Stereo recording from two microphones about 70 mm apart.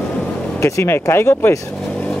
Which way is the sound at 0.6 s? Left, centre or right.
Left.